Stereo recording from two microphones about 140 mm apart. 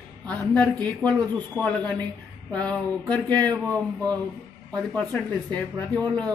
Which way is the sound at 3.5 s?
25° right (ahead or behind).